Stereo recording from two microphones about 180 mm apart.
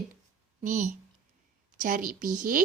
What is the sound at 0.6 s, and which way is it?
A woman's voice, 45° right (ahead or behind).